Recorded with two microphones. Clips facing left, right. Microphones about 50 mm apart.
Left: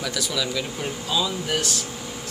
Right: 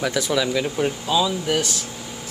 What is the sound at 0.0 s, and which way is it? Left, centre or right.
Speech, right.